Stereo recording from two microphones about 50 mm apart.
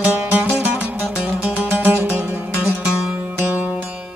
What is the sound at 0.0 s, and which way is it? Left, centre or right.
Music, right.